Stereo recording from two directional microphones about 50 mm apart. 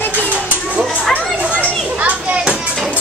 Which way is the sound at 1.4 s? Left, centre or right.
Right.